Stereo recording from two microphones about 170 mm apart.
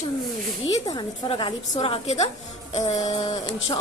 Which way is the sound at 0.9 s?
30° left (ahead or behind).